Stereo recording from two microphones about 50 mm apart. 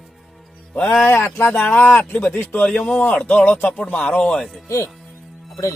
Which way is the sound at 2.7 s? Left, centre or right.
Left.